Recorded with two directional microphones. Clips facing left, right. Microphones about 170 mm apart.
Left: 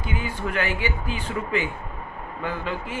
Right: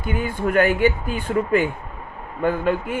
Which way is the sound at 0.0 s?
50° right (ahead or behind).